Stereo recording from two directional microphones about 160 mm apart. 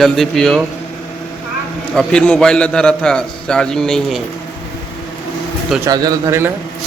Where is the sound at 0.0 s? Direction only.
Centre (ahead or behind).